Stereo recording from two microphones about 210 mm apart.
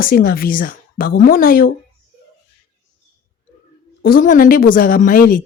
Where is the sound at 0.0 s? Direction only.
45° left (ahead or behind).